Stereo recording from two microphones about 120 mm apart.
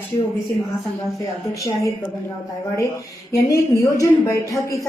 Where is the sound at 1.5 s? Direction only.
25° left (ahead or behind).